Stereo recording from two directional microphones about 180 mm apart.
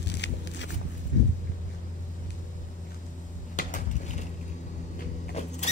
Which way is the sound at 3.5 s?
45° left (ahead or behind).